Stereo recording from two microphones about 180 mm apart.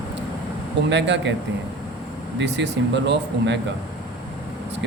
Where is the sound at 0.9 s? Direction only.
75° right (ahead or behind).